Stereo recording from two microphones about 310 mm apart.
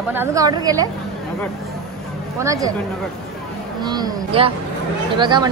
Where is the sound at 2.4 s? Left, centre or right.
Centre.